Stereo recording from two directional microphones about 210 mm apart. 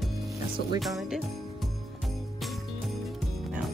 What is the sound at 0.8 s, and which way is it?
Speech, centre (ahead or behind).